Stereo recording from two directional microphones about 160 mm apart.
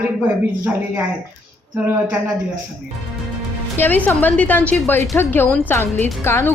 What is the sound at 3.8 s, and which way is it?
A woman's voice, 10° left (ahead or behind).